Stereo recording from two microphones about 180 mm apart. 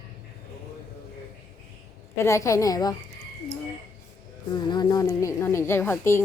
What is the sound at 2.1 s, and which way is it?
Speech, 15° left (ahead or behind).